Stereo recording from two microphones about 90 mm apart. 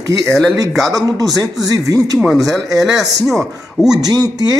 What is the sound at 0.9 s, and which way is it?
Speech, 40° right (ahead or behind).